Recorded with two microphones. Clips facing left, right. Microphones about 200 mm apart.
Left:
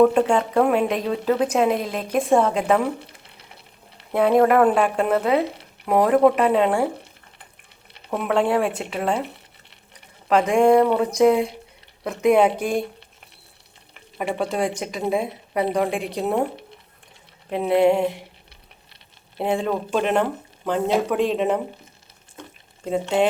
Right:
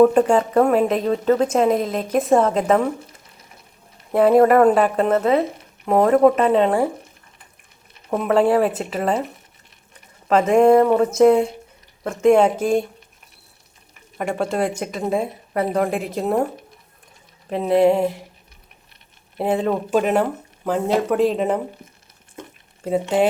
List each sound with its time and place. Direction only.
0.0 s a woman's voice: 5° right (ahead or behind)
3.0 s a sound: 30° left (ahead or behind)
4.1 s a woman's voice: centre (ahead or behind)
8.1 s a woman's voice: 5° right (ahead or behind)
10.5 s a woman's voice: 5° right (ahead or behind)
14.2 s a woman's voice: centre (ahead or behind)
17.7 s a woman's voice: 5° right (ahead or behind)
19.4 s a woman's voice: centre (ahead or behind)
22.8 s speech: 5° right (ahead or behind)